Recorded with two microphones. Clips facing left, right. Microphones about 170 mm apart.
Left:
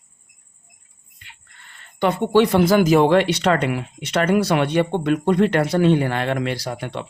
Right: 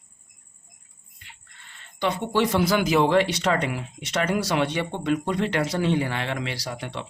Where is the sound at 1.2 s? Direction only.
55° left (ahead or behind).